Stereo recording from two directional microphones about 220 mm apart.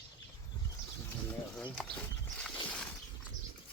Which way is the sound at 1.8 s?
5° left (ahead or behind).